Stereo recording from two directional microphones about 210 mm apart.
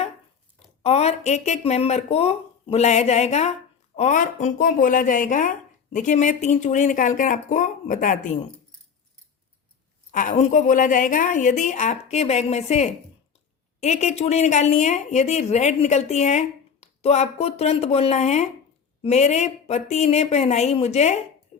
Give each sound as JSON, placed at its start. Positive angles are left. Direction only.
{"t": 0.8, "sound": "speech", "side_deg": 30}
{"t": 10.1, "sound": "speech", "side_deg": 40}
{"t": 21.5, "sound": "a sound", "side_deg": 35}